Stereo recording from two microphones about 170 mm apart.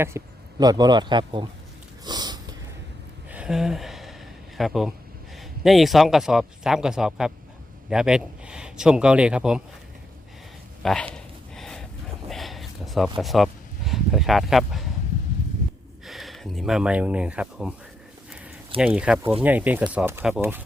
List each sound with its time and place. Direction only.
0.1 s a man's voice: 15° right (ahead or behind)
2.0 s snort: 25° right (ahead or behind)
3.2 s a sound: 5° right (ahead or behind)
4.5 s speech: centre (ahead or behind)
10.8 s a sound: 5° left (ahead or behind)
12.3 s speech: centre (ahead or behind)
16.0 s speech: centre (ahead or behind)
18.8 s speech: 5° right (ahead or behind)